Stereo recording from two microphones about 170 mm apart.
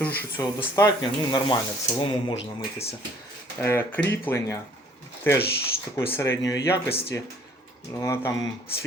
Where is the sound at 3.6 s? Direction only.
10° left (ahead or behind).